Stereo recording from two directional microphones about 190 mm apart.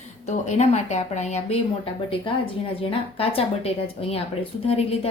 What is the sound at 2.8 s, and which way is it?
A woman's voice, 30° left (ahead or behind).